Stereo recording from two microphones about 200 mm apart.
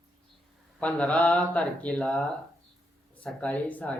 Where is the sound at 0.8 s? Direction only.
5° left (ahead or behind).